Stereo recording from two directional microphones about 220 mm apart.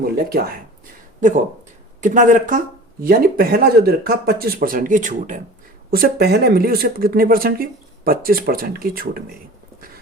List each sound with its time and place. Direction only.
0.0 s speech: 45° right (ahead or behind)
2.0 s speech: 35° right (ahead or behind)